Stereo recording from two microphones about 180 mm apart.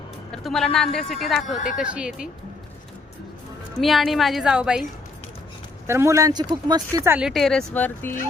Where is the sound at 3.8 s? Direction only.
Centre (ahead or behind).